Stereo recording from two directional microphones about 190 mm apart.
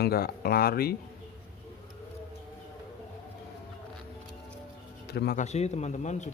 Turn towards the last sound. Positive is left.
turn(degrees=40)  # may be behind; listen again after turning